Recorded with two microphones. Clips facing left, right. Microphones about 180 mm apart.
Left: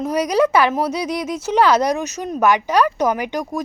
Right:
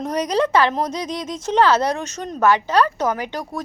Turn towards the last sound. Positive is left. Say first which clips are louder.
# left 3 dB
turn(degrees=10)  # may be behind; listen again after turning